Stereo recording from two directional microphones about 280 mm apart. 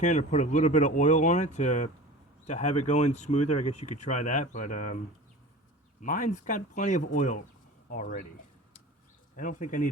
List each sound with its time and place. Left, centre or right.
0.0 s speech: left
6.0 s speech: left
9.3 s speech: left